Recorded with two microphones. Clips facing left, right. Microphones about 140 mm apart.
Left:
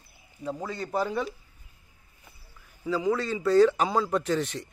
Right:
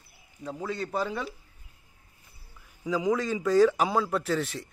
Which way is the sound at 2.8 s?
15° right (ahead or behind).